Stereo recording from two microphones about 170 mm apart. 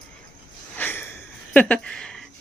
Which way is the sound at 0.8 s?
15° left (ahead or behind).